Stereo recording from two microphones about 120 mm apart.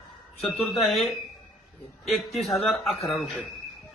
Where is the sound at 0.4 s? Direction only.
Centre (ahead or behind).